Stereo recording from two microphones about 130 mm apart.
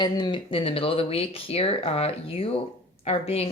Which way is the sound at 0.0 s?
35° left (ahead or behind).